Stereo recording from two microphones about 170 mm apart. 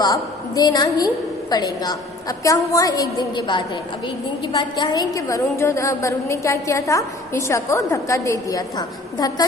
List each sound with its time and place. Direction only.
0.0 s a woman's voice: 20° left (ahead or behind)